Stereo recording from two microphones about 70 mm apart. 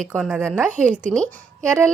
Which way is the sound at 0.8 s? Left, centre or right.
Centre.